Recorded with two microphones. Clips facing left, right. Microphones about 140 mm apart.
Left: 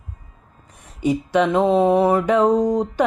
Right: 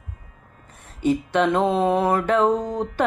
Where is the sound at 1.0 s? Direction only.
10° left (ahead or behind).